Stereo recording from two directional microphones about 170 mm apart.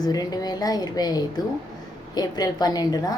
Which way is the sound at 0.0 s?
20° left (ahead or behind).